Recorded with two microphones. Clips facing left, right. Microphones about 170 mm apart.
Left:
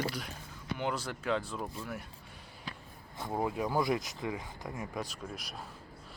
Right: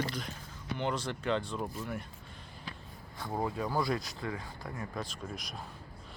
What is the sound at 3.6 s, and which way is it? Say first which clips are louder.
Speech: left 2 dB; 20° left (ahead or behind).